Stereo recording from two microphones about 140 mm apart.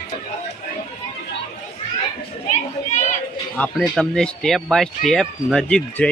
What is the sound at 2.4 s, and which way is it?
Children playing, 60° left (ahead or behind).